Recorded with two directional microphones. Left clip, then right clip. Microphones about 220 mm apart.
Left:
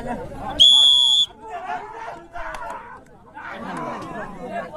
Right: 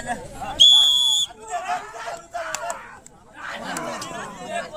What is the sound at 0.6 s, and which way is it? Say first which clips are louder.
Whistle: left 1 dB; 45° left (ahead or behind).